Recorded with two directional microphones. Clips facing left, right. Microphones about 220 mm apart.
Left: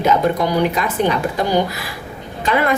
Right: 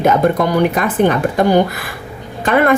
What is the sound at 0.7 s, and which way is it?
A woman's voice, 55° right (ahead or behind).